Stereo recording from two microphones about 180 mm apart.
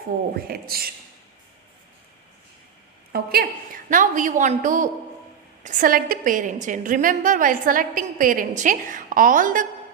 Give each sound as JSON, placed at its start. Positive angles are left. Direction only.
{"t": 0.3, "sound": "speech", "side_deg": -60}
{"t": 3.1, "sound": "a woman's voice", "side_deg": -60}